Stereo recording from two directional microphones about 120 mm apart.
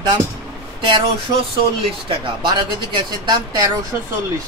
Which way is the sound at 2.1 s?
40° right (ahead or behind).